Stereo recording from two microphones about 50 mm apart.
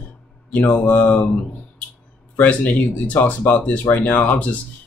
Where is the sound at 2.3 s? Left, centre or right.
Left.